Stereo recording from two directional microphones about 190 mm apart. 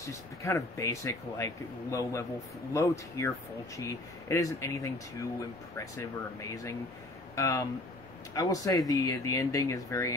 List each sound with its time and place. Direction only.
0.4 s speech: 15° left (ahead or behind)